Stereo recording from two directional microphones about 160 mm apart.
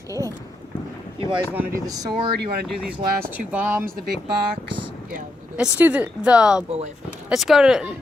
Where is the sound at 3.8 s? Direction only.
70° right (ahead or behind).